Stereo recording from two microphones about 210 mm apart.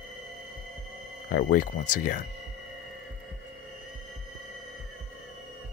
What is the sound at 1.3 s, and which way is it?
Speech, 40° left (ahead or behind).